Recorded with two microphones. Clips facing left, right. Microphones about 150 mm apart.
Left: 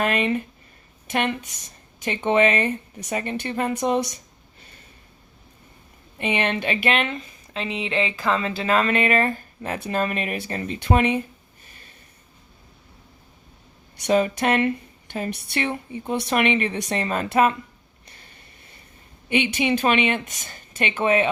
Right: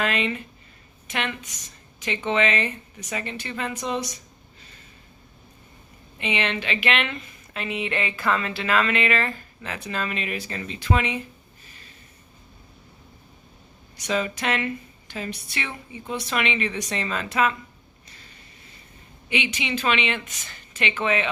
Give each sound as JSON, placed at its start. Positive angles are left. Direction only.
{"t": 0.0, "sound": "speech", "side_deg": 50}
{"t": 6.1, "sound": "speech", "side_deg": 50}
{"t": 13.9, "sound": "speech", "side_deg": 50}
{"t": 19.3, "sound": "speech", "side_deg": 50}